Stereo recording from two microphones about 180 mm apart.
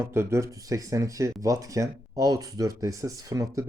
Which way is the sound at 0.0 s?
15° right (ahead or behind).